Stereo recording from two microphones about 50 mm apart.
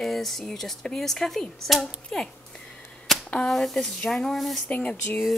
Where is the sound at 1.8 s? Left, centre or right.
Centre.